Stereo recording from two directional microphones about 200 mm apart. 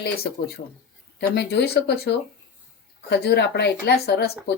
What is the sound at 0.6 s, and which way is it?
Speech, 45° left (ahead or behind).